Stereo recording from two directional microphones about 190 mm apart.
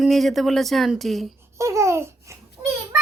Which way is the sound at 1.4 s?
15° right (ahead or behind).